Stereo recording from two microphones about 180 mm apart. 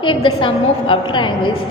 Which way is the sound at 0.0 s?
30° left (ahead or behind).